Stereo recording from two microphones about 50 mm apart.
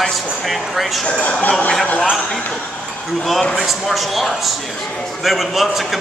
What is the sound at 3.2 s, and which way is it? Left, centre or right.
Speech, centre.